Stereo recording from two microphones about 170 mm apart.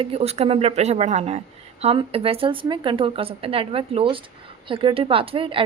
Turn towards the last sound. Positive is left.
turn(degrees=-30)  # may be behind; listen again after turning